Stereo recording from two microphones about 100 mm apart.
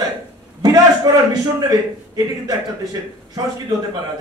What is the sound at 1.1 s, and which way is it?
A man's voice, 40° right (ahead or behind).